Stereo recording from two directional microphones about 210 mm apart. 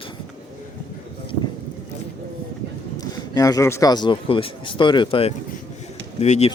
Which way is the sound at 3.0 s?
15° left (ahead or behind).